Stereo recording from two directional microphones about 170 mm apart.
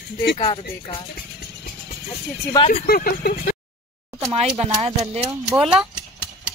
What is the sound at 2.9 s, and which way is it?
Speech, 55° left (ahead or behind).